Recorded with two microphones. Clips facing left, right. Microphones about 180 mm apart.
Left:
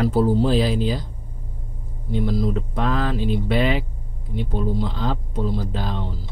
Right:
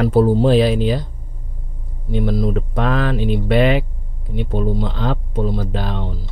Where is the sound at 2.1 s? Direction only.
60° right (ahead or behind).